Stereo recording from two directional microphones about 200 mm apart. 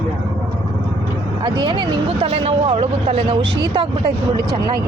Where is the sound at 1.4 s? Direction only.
25° right (ahead or behind).